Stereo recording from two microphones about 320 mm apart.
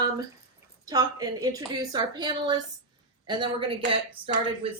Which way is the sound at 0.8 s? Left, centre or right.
Centre.